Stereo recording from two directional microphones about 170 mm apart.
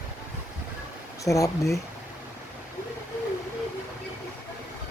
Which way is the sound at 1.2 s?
20° left (ahead or behind).